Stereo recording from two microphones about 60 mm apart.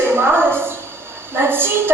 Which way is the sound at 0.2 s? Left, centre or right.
Right.